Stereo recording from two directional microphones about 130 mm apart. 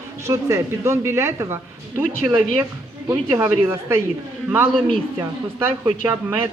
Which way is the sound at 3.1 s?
20° right (ahead or behind).